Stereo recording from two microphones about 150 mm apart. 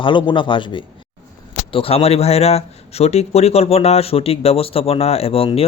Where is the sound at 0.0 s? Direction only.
35° left (ahead or behind).